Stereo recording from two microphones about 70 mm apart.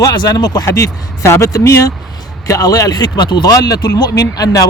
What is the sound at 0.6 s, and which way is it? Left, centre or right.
Speech, left.